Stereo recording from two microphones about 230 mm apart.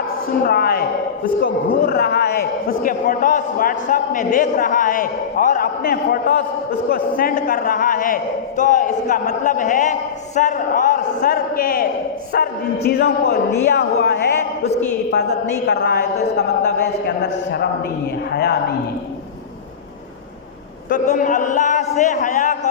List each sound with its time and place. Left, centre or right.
0.4 s a man's voice: left
15.6 s a man's voice: left
20.9 s a man's voice: left